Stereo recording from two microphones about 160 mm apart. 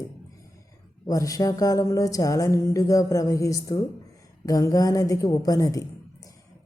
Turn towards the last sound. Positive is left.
turn(degrees=20)  # may be behind; listen again after turning